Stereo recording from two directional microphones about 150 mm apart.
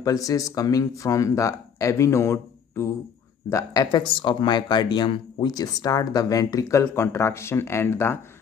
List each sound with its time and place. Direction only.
0.0 s speech: 25° left (ahead or behind)